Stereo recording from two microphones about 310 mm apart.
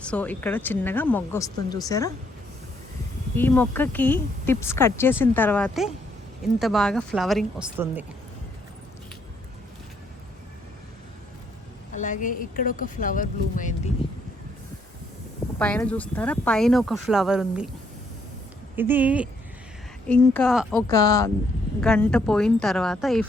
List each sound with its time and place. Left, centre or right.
0.0 s speech: centre
3.3 s speech: centre
11.9 s speech: left
15.5 s speech: centre
18.8 s speech: centre